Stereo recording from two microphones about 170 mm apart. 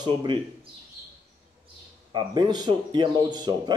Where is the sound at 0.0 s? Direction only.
25° right (ahead or behind).